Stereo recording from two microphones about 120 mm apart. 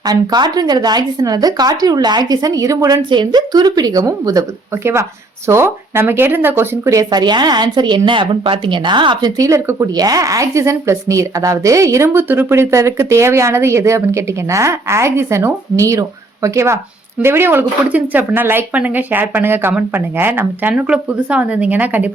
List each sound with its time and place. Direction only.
0.0 s speech: 35° right (ahead or behind); by 22.1 s 15° right (ahead or behind)